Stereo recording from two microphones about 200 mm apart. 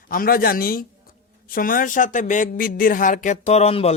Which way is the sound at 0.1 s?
45° left (ahead or behind).